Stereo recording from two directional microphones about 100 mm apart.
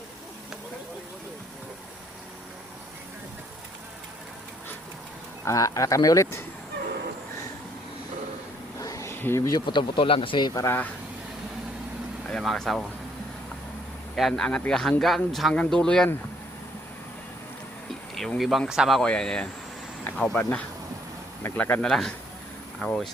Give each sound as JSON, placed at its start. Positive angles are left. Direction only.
{"t": 5.5, "sound": "speech", "side_deg": 35}
{"t": 8.8, "sound": "a sound", "side_deg": 35}
{"t": 9.1, "sound": "speech", "side_deg": 25}
{"t": 9.6, "sound": "speech", "side_deg": 50}
{"t": 10.5, "sound": "speech", "side_deg": 35}
{"t": 12.3, "sound": "speech", "side_deg": 5}
{"t": 14.2, "sound": "speech", "side_deg": 5}
{"t": 18.1, "sound": "speech", "side_deg": 0}
{"t": 19.0, "sound": "speech", "side_deg": 10}